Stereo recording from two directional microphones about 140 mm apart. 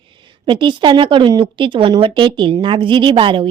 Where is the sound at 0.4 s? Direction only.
35° right (ahead or behind).